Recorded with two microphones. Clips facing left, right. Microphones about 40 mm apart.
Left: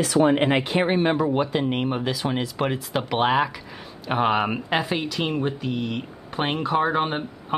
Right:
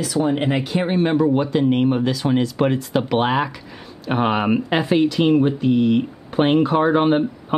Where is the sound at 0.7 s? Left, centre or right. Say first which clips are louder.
Right 2 dB; centre.